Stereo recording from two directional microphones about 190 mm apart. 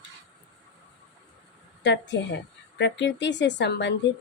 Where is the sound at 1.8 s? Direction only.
65° left (ahead or behind).